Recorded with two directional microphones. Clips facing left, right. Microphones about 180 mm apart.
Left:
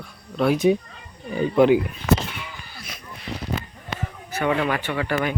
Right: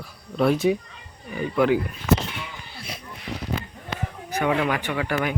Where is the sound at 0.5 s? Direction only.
20° left (ahead or behind).